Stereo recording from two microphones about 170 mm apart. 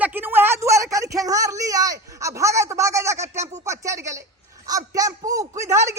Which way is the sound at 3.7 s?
20° right (ahead or behind).